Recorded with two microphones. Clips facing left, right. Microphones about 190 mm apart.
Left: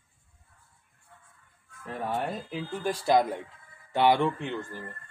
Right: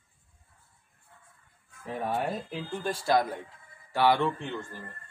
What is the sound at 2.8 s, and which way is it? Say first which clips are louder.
Speech: left 2 dB; 15° left (ahead or behind).